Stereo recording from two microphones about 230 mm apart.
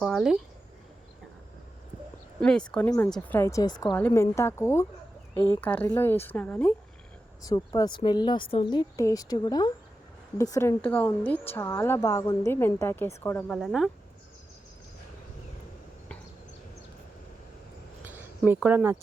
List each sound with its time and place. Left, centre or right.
0.0 s speech: centre
2.4 s a woman's voice: centre
18.0 s a sound: centre